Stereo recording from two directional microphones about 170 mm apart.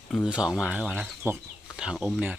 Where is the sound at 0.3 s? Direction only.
5° right (ahead or behind).